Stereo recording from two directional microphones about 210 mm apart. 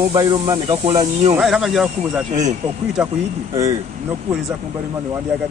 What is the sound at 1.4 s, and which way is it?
Speech, centre (ahead or behind).